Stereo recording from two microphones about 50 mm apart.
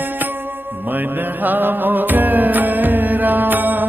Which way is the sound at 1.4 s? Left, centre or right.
Right.